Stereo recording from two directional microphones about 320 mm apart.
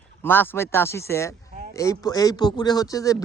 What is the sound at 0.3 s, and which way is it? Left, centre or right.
Speech, centre.